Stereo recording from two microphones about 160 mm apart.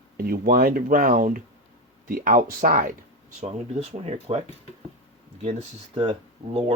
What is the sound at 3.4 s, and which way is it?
Speech, 40° right (ahead or behind).